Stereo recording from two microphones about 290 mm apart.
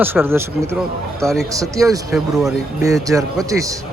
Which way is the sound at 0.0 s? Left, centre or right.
Centre.